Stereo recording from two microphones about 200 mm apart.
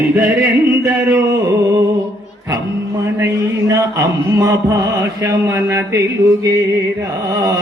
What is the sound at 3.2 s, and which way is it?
Mantra, 15° right (ahead or behind).